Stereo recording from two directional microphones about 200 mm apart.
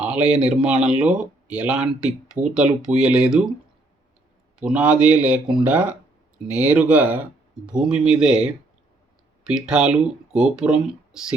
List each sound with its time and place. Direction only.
0.0 s speech: 5° right (ahead or behind)
4.6 s speech: 5° right (ahead or behind)